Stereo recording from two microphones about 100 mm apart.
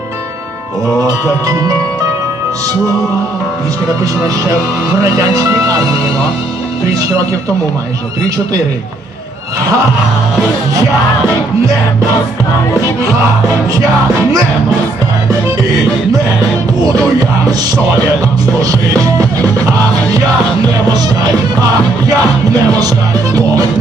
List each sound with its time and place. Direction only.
4.9 s music: 35° right (ahead or behind)
6.8 s music: 35° right (ahead or behind)
12.8 s music: 35° right (ahead or behind)
16.8 s music: 35° right (ahead or behind)
18.6 s music: 35° right (ahead or behind)